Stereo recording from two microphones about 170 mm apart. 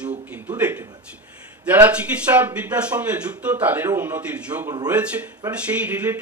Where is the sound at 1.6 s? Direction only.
10° right (ahead or behind).